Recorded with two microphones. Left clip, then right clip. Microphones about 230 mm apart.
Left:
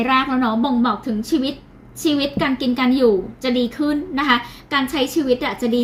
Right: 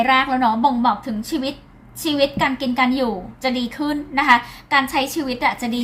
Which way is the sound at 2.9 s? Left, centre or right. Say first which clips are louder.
Left 7 dB; right.